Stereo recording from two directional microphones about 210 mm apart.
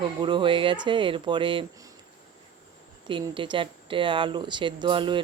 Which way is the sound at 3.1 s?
25° right (ahead or behind).